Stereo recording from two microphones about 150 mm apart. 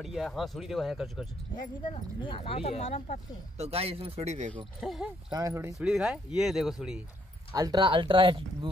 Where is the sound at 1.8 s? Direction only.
35° left (ahead or behind); by 3.2 s 55° left (ahead or behind).